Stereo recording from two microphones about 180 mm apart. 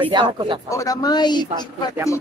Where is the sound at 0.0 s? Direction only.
25° right (ahead or behind).